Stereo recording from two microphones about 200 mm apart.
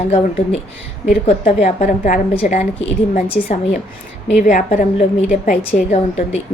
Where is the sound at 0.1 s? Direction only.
30° left (ahead or behind).